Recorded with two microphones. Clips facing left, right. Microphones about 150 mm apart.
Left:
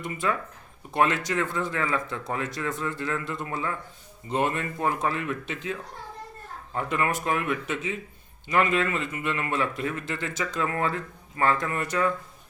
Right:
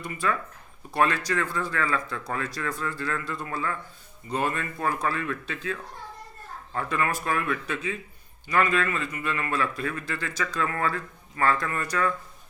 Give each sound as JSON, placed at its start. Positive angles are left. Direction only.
{"t": 0.0, "sound": "a man's voice", "side_deg": 20}
{"t": 6.7, "sound": "a man's voice", "side_deg": 20}